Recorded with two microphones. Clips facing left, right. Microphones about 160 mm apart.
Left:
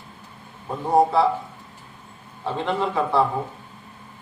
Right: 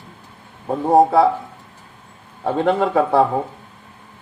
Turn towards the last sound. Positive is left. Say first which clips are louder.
# right 6 dB
turn(degrees=-50)  # may be behind; listen again after turning